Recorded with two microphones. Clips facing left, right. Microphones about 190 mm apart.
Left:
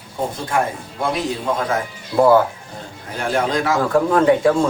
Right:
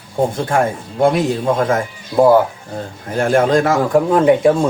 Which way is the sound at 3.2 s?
50° right (ahead or behind).